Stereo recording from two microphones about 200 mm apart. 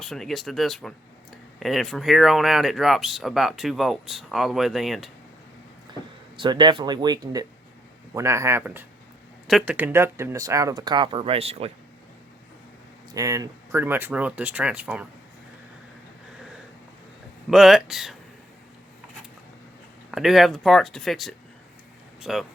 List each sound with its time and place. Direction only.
0.0 s speech: centre (ahead or behind)
6.3 s speech: 25° right (ahead or behind)
13.1 s speech: 15° right (ahead or behind)
17.5 s speech: centre (ahead or behind)
20.1 s speech: centre (ahead or behind)